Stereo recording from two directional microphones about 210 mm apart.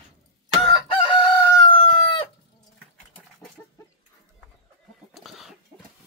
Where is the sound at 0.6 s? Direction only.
25° left (ahead or behind).